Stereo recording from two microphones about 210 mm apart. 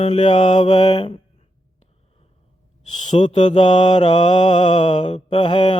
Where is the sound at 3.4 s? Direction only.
25° left (ahead or behind).